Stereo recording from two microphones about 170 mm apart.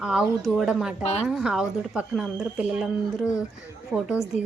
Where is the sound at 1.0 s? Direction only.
40° left (ahead or behind).